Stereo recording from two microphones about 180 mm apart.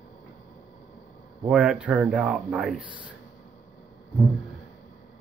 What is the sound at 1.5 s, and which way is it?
Speech, 5° right (ahead or behind).